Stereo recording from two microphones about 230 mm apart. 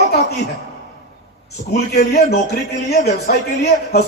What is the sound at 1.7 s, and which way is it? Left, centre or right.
A man's voice, left.